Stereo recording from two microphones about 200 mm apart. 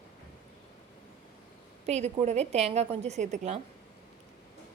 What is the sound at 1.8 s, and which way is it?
A woman's voice, 35° right (ahead or behind).